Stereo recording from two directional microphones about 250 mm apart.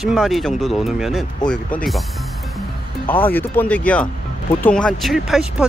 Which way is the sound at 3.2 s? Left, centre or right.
Centre.